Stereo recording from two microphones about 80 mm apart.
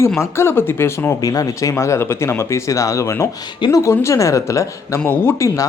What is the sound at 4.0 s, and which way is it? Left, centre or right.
Speech, left.